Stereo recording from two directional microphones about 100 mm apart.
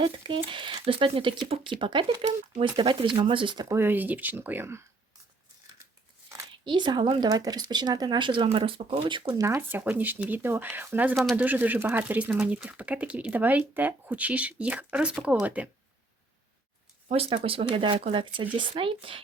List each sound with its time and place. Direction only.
0.0 s speech: 55° right (ahead or behind)
3.7 s speech: 25° right (ahead or behind)
5.8 s scissors: 30° right (ahead or behind)
6.7 s speech: 50° right (ahead or behind)
7.2 s speech: 40° right (ahead or behind); by 9.3 s 55° right (ahead or behind)
9.6 s speech: 20° right (ahead or behind)
17.1 s speech: 75° right (ahead or behind)
17.3 s speech: 65° right (ahead or behind)